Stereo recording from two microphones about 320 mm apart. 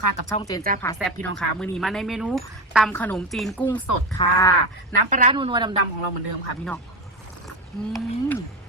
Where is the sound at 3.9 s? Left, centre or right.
Left.